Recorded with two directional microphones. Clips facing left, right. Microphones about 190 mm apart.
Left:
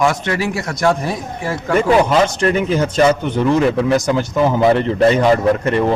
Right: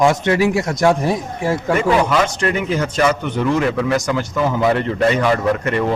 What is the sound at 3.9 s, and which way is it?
Speech, 25° left (ahead or behind).